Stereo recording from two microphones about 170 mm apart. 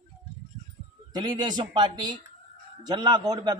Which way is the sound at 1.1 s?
25° right (ahead or behind).